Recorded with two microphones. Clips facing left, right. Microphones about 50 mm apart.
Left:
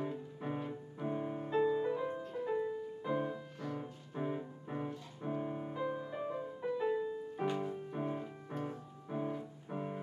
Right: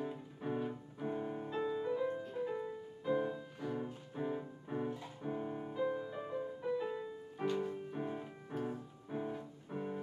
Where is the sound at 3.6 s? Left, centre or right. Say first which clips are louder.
Right 1 dB; centre.